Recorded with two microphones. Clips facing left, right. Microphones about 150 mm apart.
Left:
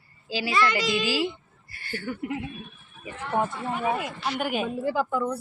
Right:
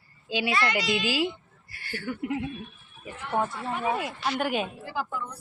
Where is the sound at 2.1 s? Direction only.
20° right (ahead or behind).